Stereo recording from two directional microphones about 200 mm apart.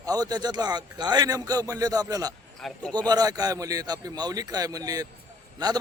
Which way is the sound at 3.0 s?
20° right (ahead or behind).